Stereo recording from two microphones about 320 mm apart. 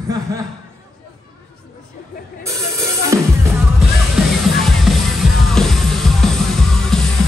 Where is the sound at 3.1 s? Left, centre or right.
Centre.